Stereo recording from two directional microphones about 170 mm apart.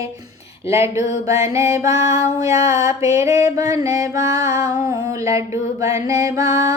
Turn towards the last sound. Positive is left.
turn(degrees=-20)  # may be behind; listen again after turning